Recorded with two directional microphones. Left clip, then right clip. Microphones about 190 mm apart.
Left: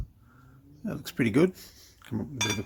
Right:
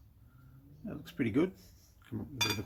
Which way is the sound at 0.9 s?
50° left (ahead or behind).